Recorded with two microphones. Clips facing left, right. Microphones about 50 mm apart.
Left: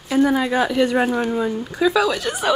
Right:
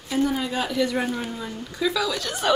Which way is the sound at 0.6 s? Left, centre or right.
Left.